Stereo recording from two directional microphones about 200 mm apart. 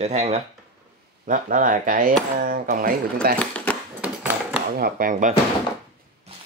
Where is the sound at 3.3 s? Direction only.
5° left (ahead or behind).